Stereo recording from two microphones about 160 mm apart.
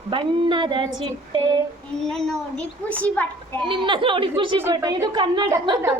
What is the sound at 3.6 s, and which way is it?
Speech, 30° right (ahead or behind).